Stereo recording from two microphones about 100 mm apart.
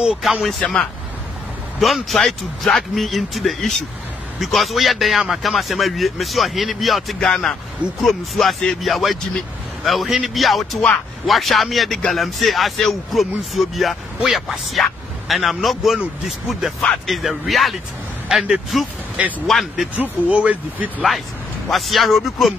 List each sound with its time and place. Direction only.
0.0 s a man's voice: 5° right (ahead or behind)
20.0 s speech: 15° right (ahead or behind)
21.6 s a man's voice: centre (ahead or behind)